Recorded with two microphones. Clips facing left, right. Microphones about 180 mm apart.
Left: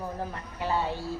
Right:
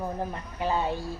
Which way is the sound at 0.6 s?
20° right (ahead or behind).